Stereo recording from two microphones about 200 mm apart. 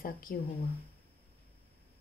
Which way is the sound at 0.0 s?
45° left (ahead or behind).